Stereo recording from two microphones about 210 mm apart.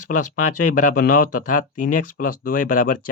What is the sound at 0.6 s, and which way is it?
Speech, 40° left (ahead or behind).